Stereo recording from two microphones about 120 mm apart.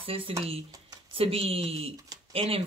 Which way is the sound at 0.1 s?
55° right (ahead or behind).